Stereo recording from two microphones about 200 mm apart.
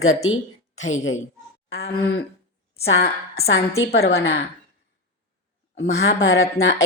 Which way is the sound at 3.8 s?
55° left (ahead or behind).